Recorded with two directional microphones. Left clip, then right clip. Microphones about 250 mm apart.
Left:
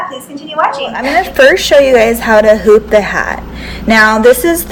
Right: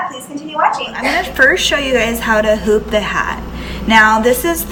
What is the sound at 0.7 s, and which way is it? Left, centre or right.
A woman's voice, centre.